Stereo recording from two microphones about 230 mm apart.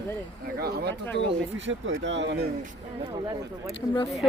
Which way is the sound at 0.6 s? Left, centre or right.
Right.